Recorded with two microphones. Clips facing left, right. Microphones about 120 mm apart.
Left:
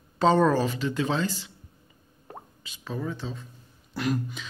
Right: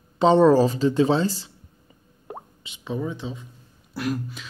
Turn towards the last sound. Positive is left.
turn(degrees=-5)  # may be behind; listen again after turning